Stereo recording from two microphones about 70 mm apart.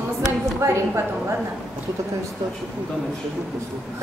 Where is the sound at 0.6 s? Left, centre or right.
Right.